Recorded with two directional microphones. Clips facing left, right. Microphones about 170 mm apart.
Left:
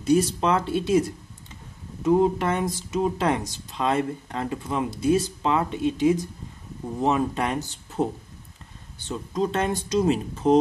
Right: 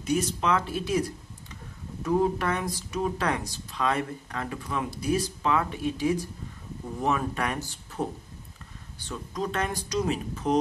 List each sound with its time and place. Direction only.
0.0 s speech: 35° left (ahead or behind)